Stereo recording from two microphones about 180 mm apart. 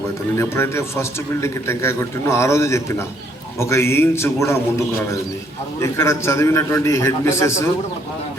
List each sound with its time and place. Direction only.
0.3 s a man's voice: 15° left (ahead or behind)
5.8 s a man's voice: 15° left (ahead or behind)